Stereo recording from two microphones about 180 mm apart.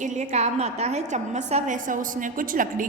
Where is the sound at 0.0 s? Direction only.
40° right (ahead or behind).